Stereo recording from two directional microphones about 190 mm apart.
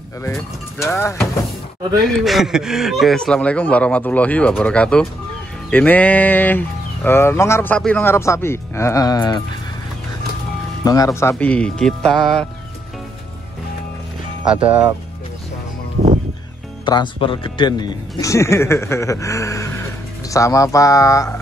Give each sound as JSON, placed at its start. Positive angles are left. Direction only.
{"t": 0.2, "sound": "speech", "side_deg": 15}
{"t": 2.0, "sound": "speech", "side_deg": 0}
{"t": 10.8, "sound": "speech", "side_deg": 20}
{"t": 14.4, "sound": "speech", "side_deg": -5}
{"t": 16.8, "sound": "speech", "side_deg": 25}